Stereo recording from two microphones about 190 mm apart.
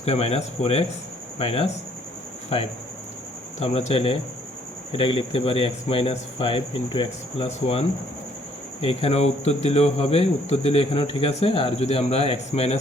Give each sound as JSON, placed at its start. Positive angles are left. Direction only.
{"t": 0.0, "sound": "speech", "side_deg": 35}
{"t": 3.6, "sound": "speech", "side_deg": 30}